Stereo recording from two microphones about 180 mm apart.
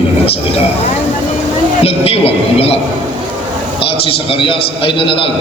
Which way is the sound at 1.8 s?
35° left (ahead or behind).